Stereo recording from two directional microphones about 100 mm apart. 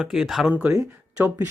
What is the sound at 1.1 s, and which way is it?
Speech, 20° right (ahead or behind).